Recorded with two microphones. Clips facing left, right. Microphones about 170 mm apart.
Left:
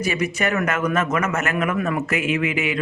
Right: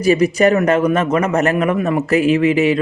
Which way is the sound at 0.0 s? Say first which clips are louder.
Right 10 dB; 35° right (ahead or behind).